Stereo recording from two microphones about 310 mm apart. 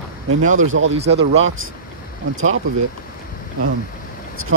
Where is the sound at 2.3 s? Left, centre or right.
Right.